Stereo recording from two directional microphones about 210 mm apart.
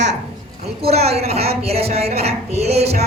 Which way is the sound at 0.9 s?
30° right (ahead or behind).